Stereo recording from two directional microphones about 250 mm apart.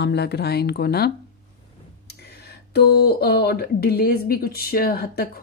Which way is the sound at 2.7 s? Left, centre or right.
Left.